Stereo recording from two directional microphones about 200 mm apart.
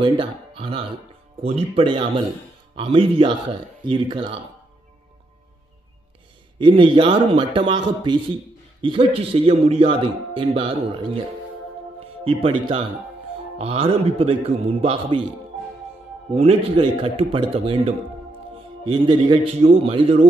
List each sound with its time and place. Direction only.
0.0 s a man's voice: 25° right (ahead or behind)
6.6 s a man's voice: 25° right (ahead or behind)
12.3 s a man's voice: 25° right (ahead or behind)
16.3 s a man's voice: 30° right (ahead or behind)